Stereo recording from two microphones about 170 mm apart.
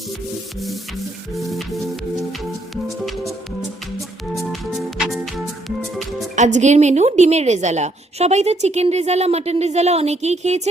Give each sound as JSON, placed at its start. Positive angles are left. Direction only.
{"t": 1.3, "sound": "music", "side_deg": 0}
{"t": 4.4, "sound": "music", "side_deg": 0}
{"t": 6.3, "sound": "a woman's voice", "side_deg": -45}